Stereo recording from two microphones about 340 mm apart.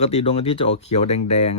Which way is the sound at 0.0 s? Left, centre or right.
Centre.